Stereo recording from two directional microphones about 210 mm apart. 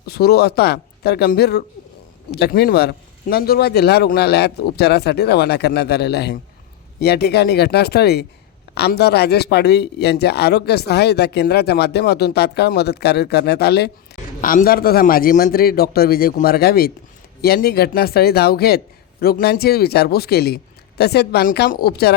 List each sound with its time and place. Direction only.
0.0 s a man's voice: 50° left (ahead or behind)